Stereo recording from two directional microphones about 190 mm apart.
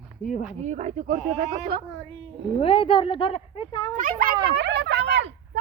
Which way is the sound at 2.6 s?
30° left (ahead or behind).